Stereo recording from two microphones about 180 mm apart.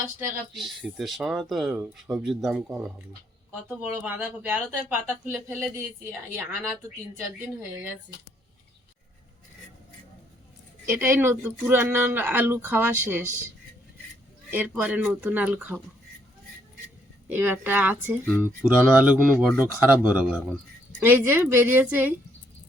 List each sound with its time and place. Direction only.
0.5 s speech: centre (ahead or behind)
10.8 s speech: 10° right (ahead or behind)
14.5 s speech: 10° right (ahead or behind)
17.2 s speech: 10° right (ahead or behind)